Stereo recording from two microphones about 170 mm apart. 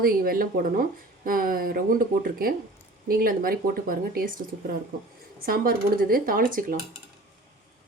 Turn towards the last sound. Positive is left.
turn(degrees=-55)  # may be behind; listen again after turning